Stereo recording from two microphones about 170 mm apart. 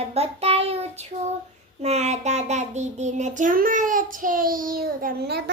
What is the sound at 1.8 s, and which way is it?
Child singing, 40° right (ahead or behind).